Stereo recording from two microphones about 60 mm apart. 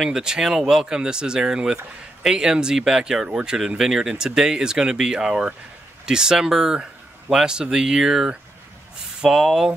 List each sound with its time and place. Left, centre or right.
0.0 s speech: centre